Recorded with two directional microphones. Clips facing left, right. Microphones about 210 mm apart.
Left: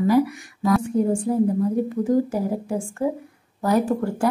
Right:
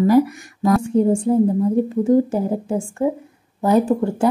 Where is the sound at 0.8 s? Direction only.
25° right (ahead or behind).